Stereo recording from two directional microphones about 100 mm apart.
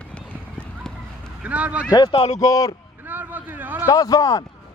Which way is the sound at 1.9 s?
40° left (ahead or behind).